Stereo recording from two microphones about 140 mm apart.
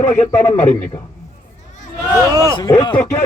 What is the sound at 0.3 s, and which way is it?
Speech, 15° left (ahead or behind).